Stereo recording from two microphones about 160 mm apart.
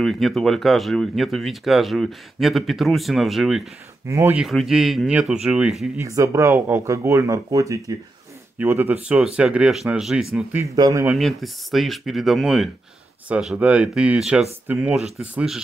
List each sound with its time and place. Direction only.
0.0 s speech: centre (ahead or behind)
4.1 s speech: 15° right (ahead or behind)
4.4 s speech: centre (ahead or behind)
5.9 s speech: 20° right (ahead or behind)
10.6 s speech: 20° right (ahead or behind)
11.1 s speech: centre (ahead or behind)